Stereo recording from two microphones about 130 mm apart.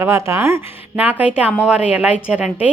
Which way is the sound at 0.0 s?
20° right (ahead or behind).